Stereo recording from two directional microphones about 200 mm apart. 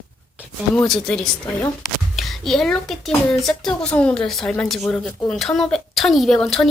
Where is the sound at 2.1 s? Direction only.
Centre (ahead or behind).